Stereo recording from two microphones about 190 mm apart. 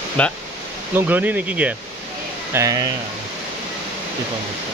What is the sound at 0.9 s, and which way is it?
Speech, 10° right (ahead or behind).